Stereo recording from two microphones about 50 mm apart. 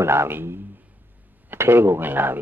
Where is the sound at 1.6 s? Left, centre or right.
Right.